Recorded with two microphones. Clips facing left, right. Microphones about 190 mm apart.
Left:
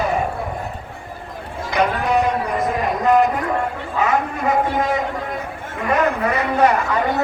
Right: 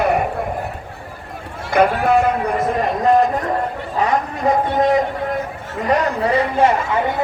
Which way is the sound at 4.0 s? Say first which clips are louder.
Right 1 dB; 35° right (ahead or behind).